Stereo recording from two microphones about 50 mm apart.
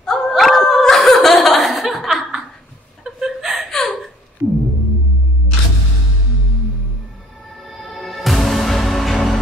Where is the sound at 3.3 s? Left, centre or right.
Centre.